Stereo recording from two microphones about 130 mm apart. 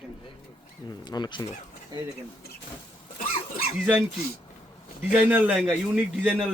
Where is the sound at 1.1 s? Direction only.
35° left (ahead or behind).